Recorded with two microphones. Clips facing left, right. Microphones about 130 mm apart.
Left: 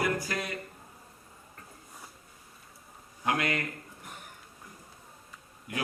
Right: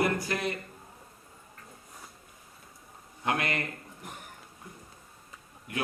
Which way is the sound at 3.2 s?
25° right (ahead or behind).